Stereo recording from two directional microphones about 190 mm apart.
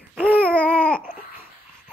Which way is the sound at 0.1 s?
5° right (ahead or behind).